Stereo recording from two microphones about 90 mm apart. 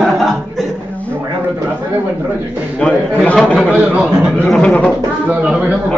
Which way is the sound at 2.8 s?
10° left (ahead or behind).